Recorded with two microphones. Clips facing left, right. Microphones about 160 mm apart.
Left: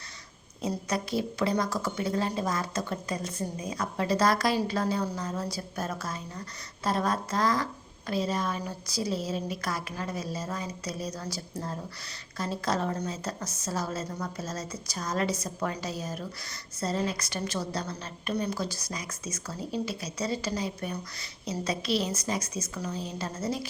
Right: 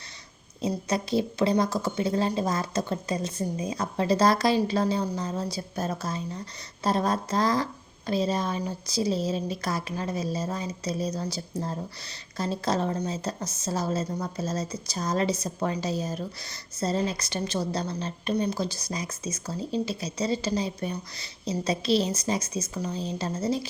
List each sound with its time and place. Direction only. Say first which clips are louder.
0.6 s a woman's voice: right 3 dB; 20° right (ahead or behind)